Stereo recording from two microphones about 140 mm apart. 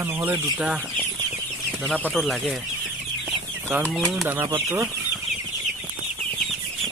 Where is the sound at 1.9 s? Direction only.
Centre (ahead or behind).